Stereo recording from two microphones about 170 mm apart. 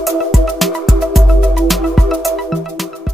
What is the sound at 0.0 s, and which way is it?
Music, centre (ahead or behind).